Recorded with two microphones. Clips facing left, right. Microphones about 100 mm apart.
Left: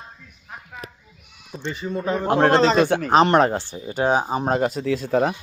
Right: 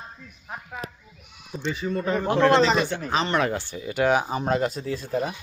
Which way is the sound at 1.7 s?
5° left (ahead or behind).